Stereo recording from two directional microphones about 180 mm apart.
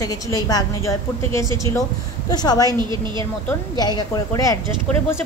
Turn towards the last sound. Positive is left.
turn(degrees=20)  # may be behind; listen again after turning